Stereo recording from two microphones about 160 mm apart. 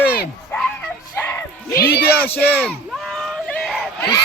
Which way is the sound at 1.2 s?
15° left (ahead or behind).